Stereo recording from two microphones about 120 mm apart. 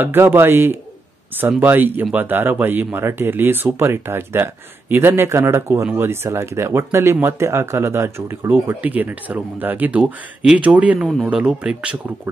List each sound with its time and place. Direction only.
0.0 s speech: 20° right (ahead or behind)